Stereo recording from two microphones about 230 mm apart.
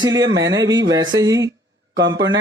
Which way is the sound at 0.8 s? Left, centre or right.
Centre.